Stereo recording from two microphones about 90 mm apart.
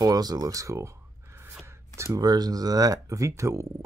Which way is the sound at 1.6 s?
30° right (ahead or behind).